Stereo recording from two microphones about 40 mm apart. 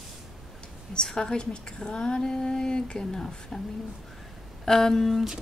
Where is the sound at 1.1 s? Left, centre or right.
Left.